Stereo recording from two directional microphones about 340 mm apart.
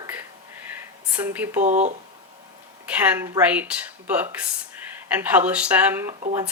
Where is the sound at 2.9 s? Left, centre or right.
Centre.